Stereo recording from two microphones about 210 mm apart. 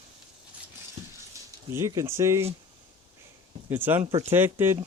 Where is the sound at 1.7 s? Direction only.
15° right (ahead or behind).